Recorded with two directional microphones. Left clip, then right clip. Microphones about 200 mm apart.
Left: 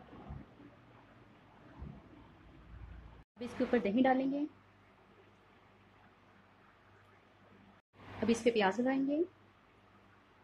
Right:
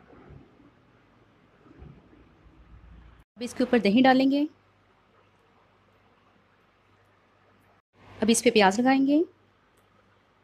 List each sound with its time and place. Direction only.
3.3 s speech: 50° right (ahead or behind)
8.3 s speech: 55° right (ahead or behind)